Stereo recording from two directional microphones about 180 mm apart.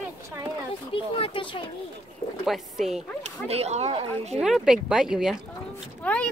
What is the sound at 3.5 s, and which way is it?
Speech, 35° right (ahead or behind).